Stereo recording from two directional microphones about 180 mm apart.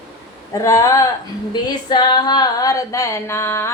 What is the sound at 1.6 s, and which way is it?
Female singing, 25° left (ahead or behind).